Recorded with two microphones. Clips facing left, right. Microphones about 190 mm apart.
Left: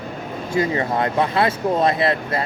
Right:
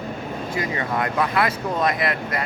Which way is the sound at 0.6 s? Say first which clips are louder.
Left 6 dB; 30° left (ahead or behind).